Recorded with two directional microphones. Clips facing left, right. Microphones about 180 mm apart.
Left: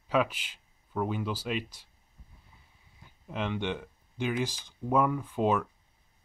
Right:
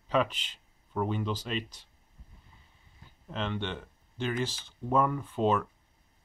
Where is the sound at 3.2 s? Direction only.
10° left (ahead or behind).